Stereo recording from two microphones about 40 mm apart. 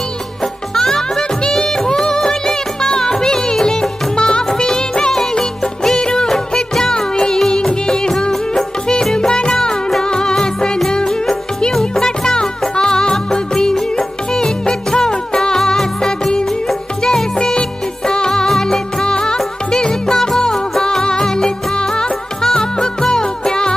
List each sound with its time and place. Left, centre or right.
0.4 s music: centre
5.9 s music: centre